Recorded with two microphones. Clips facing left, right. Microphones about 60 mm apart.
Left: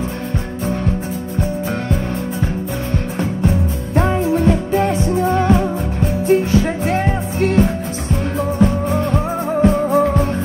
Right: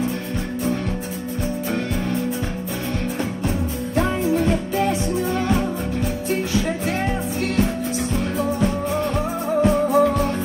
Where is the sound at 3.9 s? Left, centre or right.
Left.